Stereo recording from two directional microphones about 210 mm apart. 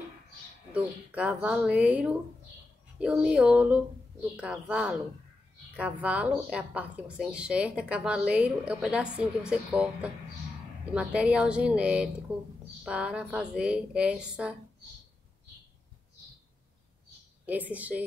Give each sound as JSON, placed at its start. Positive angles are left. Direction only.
{"t": 0.7, "sound": "a woman's voice", "side_deg": -5}
{"t": 17.5, "sound": "a woman's voice", "side_deg": -5}